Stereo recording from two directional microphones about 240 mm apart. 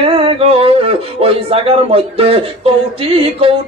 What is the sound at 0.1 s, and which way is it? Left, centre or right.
Speech, right.